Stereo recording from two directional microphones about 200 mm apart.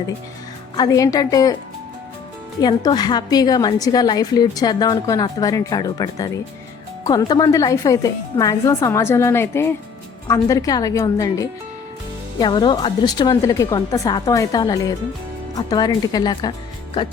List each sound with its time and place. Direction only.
0.8 s a woman's voice: 15° left (ahead or behind)
2.6 s a woman's voice: 20° left (ahead or behind)